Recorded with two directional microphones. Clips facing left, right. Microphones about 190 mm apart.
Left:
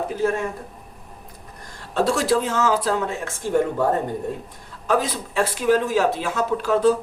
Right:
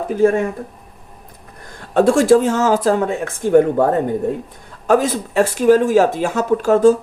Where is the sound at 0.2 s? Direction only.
55° right (ahead or behind).